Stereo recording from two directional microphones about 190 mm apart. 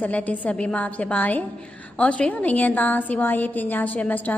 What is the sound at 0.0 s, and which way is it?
A woman's voice, 5° left (ahead or behind).